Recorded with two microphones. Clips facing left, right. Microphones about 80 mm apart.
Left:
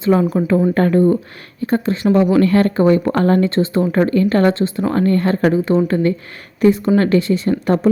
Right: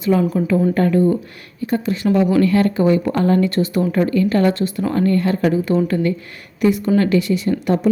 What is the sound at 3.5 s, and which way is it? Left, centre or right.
Speech, left.